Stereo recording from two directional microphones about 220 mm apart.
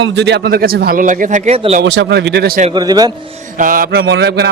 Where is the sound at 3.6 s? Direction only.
40° right (ahead or behind).